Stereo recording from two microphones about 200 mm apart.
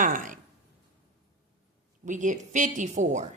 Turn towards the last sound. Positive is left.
turn(degrees=-35)  # may be behind; listen again after turning